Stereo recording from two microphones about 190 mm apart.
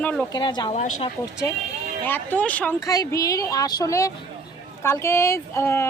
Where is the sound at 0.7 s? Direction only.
35° left (ahead or behind).